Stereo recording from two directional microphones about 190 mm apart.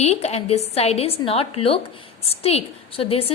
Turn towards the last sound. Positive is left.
turn(degrees=30)  # may be behind; listen again after turning